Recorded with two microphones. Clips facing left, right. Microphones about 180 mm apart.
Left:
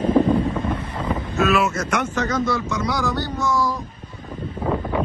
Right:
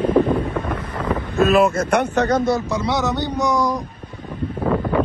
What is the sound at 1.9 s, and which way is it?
Speech, 65° right (ahead or behind).